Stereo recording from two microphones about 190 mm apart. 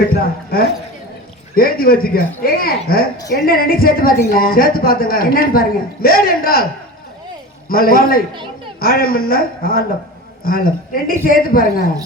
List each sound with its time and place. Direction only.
0.1 s a man's voice: 55° left (ahead or behind)
7.7 s a man's voice: 50° left (ahead or behind)